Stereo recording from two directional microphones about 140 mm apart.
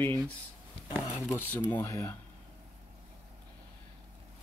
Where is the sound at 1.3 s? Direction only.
15° left (ahead or behind).